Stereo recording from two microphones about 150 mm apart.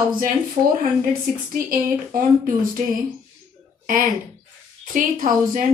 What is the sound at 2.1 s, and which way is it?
Speech, 60° right (ahead or behind).